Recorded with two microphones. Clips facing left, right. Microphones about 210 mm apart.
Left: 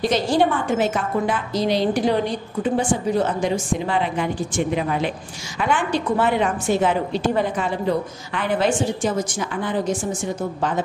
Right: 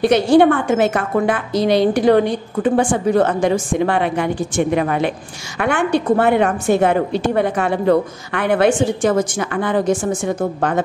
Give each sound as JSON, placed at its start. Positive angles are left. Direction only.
{"t": 0.0, "sound": "a woman's voice", "side_deg": -60}